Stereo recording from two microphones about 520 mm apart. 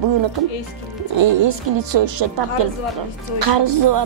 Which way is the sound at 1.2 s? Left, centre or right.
Right.